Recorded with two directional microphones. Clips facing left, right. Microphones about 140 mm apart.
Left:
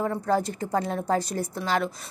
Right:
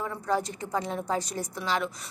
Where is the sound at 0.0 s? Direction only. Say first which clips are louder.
Left 4 dB; 50° left (ahead or behind).